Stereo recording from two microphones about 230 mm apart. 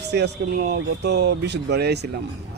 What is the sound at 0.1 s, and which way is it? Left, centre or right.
Speech, right.